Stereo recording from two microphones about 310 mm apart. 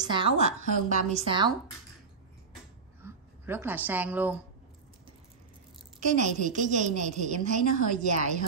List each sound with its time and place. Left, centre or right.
0.0 s a woman's voice: centre
3.0 s speech: centre
6.1 s a woman's voice: right